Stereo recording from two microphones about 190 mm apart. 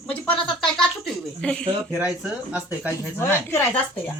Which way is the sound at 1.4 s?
5° left (ahead or behind).